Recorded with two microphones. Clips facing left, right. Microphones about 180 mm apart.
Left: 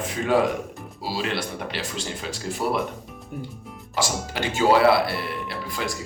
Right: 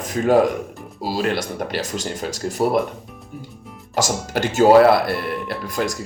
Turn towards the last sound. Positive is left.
turn(degrees=-50)  # may be behind; listen again after turning